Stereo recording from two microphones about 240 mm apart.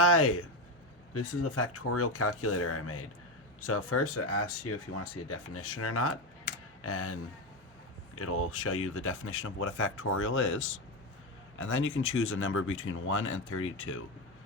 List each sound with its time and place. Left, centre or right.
0.0 s speech: left